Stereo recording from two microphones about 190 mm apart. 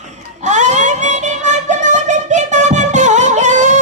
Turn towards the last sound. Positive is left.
turn(degrees=-40)  # may be behind; listen again after turning